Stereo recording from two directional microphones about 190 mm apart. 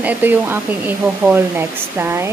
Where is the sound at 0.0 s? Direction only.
10° right (ahead or behind).